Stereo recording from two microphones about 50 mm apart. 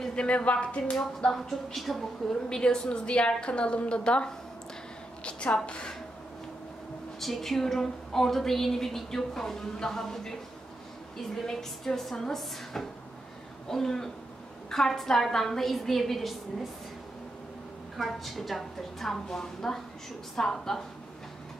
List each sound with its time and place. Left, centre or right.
0.0 s a woman's voice: centre
1.3 s a woman's voice: centre; by 4.3 s left
5.2 s a sound: left
7.2 s a woman's voice: centre
11.3 s a woman's voice: centre
17.9 s a woman's voice: centre